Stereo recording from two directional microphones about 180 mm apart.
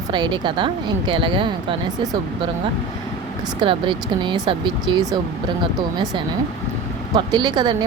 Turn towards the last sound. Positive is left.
turn(degrees=-25)  # may be behind; listen again after turning